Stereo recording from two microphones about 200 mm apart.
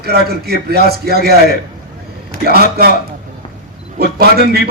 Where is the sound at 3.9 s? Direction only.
55° right (ahead or behind).